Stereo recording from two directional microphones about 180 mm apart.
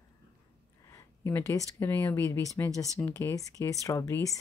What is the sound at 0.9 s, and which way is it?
Speech, 15° left (ahead or behind).